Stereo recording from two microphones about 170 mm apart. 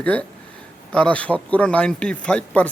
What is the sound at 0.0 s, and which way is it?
Speech, 10° left (ahead or behind).